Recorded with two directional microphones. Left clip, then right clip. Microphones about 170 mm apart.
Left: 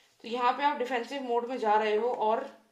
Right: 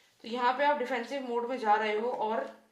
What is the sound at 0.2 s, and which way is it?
A woman's voice, 30° left (ahead or behind).